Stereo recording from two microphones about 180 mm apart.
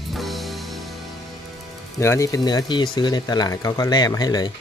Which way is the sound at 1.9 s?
15° left (ahead or behind).